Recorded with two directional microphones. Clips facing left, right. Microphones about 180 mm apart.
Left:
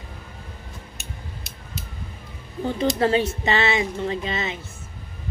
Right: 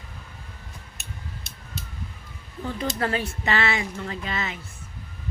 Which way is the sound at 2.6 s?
25° left (ahead or behind).